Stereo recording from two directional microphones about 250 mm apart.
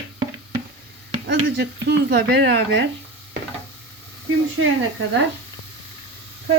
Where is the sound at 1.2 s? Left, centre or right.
Right.